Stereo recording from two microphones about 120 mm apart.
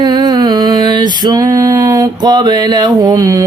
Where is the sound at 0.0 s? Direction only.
35° right (ahead or behind).